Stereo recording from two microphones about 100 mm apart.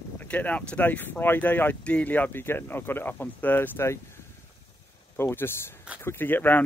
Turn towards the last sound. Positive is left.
turn(degrees=20)  # may be behind; listen again after turning